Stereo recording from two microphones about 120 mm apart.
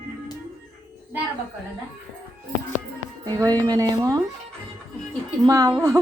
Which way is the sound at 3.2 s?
30° right (ahead or behind).